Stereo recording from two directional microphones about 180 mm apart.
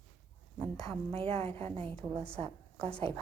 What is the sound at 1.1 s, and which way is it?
Speech, 35° right (ahead or behind).